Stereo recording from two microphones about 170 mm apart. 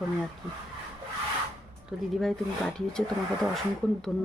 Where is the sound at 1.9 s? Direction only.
5° right (ahead or behind).